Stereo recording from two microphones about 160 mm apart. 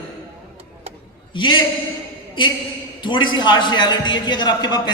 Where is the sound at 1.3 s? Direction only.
30° left (ahead or behind).